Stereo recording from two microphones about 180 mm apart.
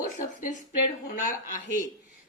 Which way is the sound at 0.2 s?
45° left (ahead or behind).